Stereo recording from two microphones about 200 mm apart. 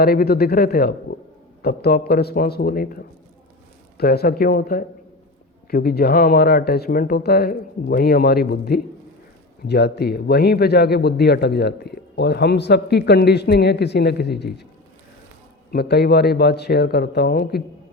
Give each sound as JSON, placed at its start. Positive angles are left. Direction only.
{"t": 0.0, "sound": "a man's voice", "side_deg": 50}
{"t": 15.7, "sound": "speech", "side_deg": 55}